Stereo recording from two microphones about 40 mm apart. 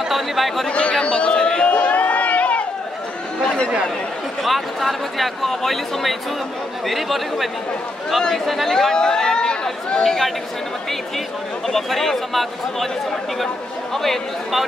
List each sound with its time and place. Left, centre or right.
0.1 s speech: centre
0.7 s a man's voice: left
1.7 s crowd: left
3.4 s speech: left
4.4 s speech: centre
8.6 s chatter: centre
10.0 s speech: centre
11.6 s speech: centre
13.9 s speech: centre